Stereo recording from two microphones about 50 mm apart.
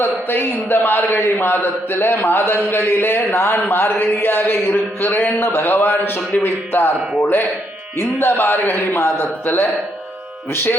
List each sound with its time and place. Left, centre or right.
0.0 s a man's voice: left